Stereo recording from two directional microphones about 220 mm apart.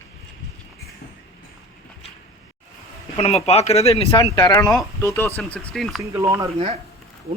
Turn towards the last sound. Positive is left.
turn(degrees=-25)  # may be behind; listen again after turning